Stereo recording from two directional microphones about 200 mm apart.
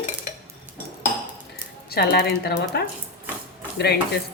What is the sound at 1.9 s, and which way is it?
Speech, 55° left (ahead or behind).